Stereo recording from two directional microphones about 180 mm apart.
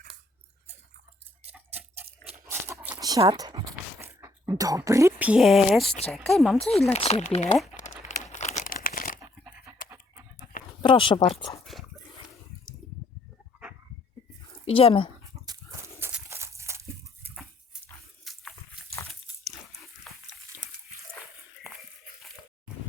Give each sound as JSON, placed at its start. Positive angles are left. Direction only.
{"t": 1.5, "sound": "a sound", "side_deg": -10}
{"t": 2.5, "sound": "dog", "side_deg": -15}
{"t": 6.1, "sound": "speech", "side_deg": 0}
{"t": 6.6, "sound": "speech", "side_deg": 35}
{"t": 7.8, "sound": "crumpling", "side_deg": 40}
{"t": 10.8, "sound": "speech", "side_deg": 25}
{"t": 11.6, "sound": "dog", "side_deg": 0}
{"t": 14.6, "sound": "speech", "side_deg": 30}
{"t": 16.0, "sound": "a sound", "side_deg": -15}
{"t": 18.3, "sound": "dog", "side_deg": 0}
{"t": 20.1, "sound": "dog", "side_deg": 5}